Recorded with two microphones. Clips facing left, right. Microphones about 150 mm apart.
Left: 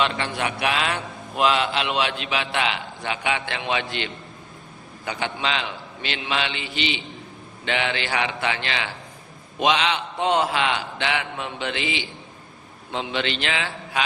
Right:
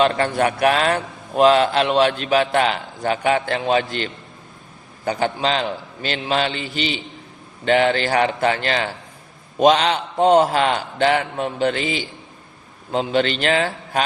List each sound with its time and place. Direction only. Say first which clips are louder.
0.0 s a man's voice: right 7 dB; 45° right (ahead or behind)